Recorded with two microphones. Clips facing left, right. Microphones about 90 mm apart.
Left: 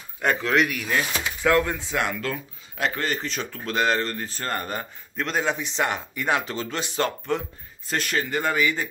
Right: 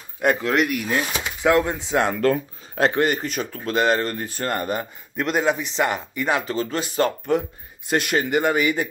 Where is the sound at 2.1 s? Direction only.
45° right (ahead or behind).